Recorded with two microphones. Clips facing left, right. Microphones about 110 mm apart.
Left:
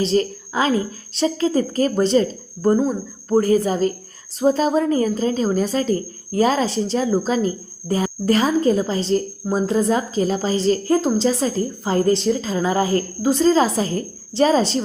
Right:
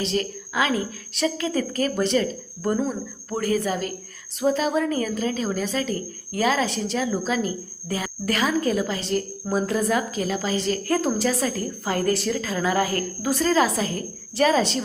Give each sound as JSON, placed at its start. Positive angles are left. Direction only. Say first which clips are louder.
{"t": 0.0, "sound": "a woman's voice", "louder": "left 7 dB", "side_deg": 35}
{"t": 10.9, "sound": "a woman's voice", "louder": "left 4 dB", "side_deg": 20}